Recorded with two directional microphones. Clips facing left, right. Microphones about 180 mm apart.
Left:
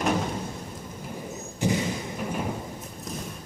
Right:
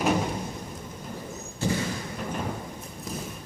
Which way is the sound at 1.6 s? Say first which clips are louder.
Left 2 dB; 15° left (ahead or behind).